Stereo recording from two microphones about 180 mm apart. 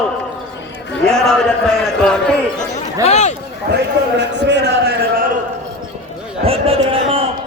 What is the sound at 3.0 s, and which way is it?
Speech, 40° left (ahead or behind).